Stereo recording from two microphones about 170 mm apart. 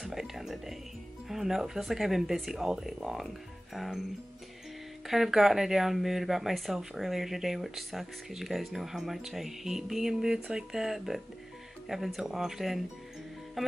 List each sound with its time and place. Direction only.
0.0 s music: centre (ahead or behind)
1.3 s speech: centre (ahead or behind)
5.0 s speech: centre (ahead or behind)